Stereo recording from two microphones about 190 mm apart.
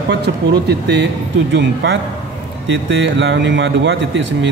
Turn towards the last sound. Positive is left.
turn(degrees=-70)  # may be behind; listen again after turning